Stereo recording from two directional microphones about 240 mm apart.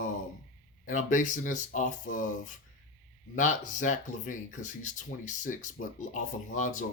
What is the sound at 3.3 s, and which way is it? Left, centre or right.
Speech, left.